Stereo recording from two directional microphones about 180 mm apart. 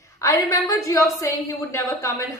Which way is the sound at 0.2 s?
20° left (ahead or behind).